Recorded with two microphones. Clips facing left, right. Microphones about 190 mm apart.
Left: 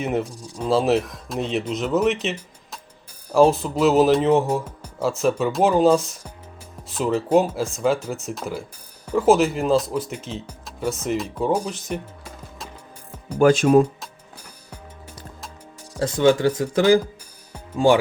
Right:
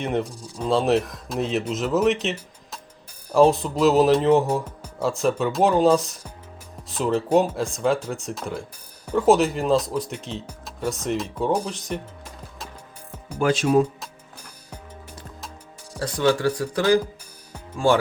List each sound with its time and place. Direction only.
0.0 s speech: 5° left (ahead or behind)
13.4 s speech: 50° left (ahead or behind)
16.0 s speech: 25° left (ahead or behind)